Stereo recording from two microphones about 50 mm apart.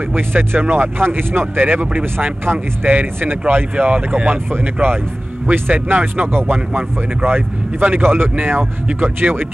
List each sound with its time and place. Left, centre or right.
0.1 s speech: right
3.7 s speech: right
5.5 s speech: right